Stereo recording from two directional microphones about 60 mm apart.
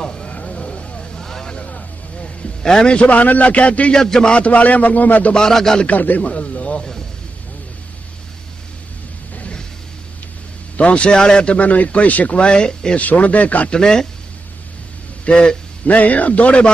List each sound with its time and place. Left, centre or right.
0.0 s vehicle: centre
2.2 s a man's voice: centre
5.3 s speech: centre
5.9 s a man's voice: left
9.4 s music: centre
10.8 s a man's voice: centre
13.0 s a man's voice: left
13.7 s speech: centre
15.2 s a man's voice: centre